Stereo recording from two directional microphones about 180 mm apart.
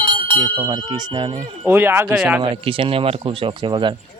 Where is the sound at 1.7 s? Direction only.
10° right (ahead or behind).